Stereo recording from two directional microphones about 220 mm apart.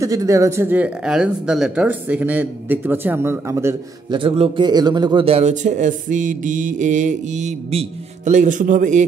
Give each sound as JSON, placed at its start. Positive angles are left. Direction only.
{"t": 0.0, "sound": "speech", "side_deg": -15}
{"t": 4.2, "sound": "speech", "side_deg": -25}